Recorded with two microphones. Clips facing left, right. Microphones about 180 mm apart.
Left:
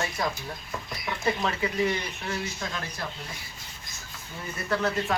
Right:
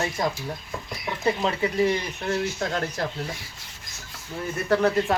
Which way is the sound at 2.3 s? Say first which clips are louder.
Right 8 dB; 55° right (ahead or behind).